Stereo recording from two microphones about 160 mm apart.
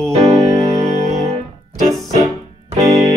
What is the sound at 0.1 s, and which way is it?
Music, 45° right (ahead or behind).